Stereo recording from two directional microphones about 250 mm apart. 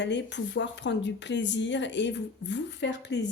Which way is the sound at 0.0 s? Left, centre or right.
Left.